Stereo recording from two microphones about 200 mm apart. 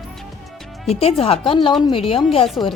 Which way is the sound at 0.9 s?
30° left (ahead or behind).